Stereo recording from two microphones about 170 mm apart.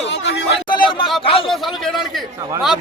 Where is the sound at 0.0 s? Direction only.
90° left.